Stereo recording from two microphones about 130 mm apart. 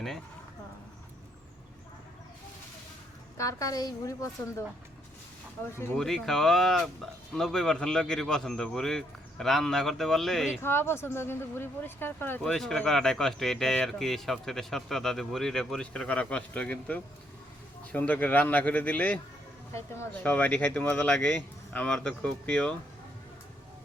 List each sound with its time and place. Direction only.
3.3 s a woman's voice: 25° left (ahead or behind)
5.7 s a woman's voice: 20° left (ahead or behind)
6.0 s speech: 5° left (ahead or behind)
10.6 s speech: 20° left (ahead or behind)
12.4 s speech: 5° left (ahead or behind)